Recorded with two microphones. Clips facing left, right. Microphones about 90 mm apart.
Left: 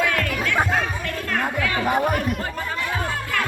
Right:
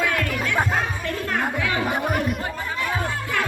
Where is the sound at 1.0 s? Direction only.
20° right (ahead or behind).